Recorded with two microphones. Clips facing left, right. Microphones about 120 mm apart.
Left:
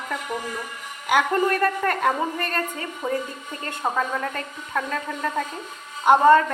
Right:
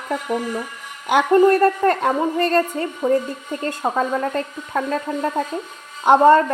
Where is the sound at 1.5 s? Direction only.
35° right (ahead or behind).